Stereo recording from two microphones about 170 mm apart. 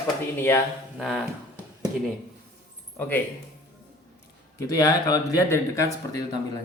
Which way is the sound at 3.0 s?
10° left (ahead or behind).